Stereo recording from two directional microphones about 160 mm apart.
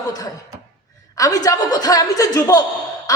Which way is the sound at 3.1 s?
20° left (ahead or behind).